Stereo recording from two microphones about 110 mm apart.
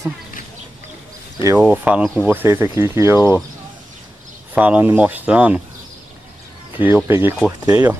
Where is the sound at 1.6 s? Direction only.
10° right (ahead or behind).